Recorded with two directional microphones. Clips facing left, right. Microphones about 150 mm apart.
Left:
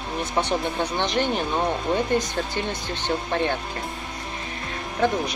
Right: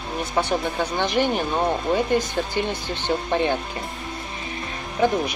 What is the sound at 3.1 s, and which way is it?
Speech, 10° right (ahead or behind).